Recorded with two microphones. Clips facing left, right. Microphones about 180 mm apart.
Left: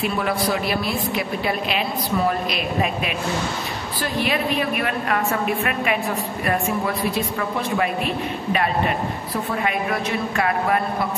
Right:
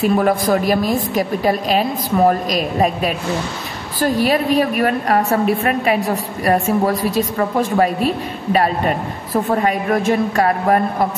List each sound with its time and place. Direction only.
0.0 s a woman's voice: 45° right (ahead or behind)